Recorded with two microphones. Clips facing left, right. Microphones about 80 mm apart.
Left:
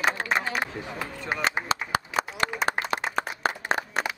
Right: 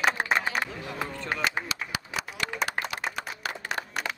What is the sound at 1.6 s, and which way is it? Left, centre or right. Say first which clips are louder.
Clapping: left 7 dB; left.